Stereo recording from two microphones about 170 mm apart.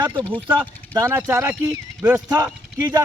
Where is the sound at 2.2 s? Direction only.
20° right (ahead or behind).